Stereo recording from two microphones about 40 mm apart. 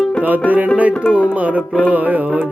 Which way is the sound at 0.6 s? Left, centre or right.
Right.